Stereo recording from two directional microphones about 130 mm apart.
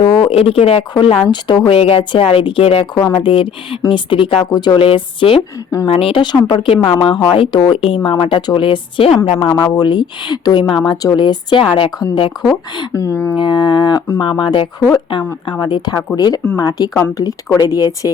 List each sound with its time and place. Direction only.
0.0 s a sound: 40° left (ahead or behind)
0.9 s speech: 45° left (ahead or behind)
9.5 s a woman's voice: 30° left (ahead or behind)
13.4 s a woman's voice: 35° left (ahead or behind)